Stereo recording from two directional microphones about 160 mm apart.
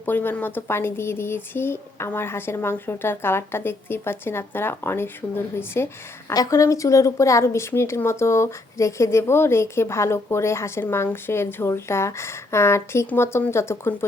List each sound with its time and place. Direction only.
0.0 s a woman's voice: 10° left (ahead or behind)